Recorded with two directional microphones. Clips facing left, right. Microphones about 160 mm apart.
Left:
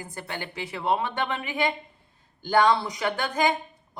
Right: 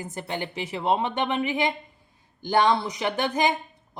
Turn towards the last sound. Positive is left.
turn(degrees=-20)  # may be behind; listen again after turning